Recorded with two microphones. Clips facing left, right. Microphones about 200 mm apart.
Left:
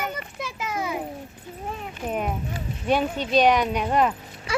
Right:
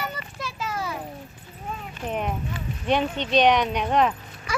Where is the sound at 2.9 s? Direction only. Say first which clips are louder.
Left 1 dB; 5° left (ahead or behind).